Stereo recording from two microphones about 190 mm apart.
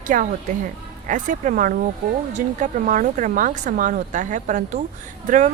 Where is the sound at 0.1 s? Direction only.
45° right (ahead or behind).